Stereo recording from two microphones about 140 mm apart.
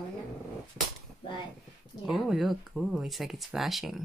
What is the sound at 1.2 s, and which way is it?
Speech, 35° left (ahead or behind).